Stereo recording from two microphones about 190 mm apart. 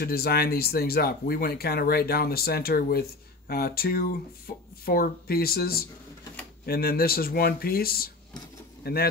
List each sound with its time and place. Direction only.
0.0 s speech: 55° left (ahead or behind)